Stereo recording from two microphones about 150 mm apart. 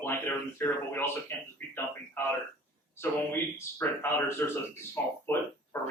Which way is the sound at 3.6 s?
15° left (ahead or behind).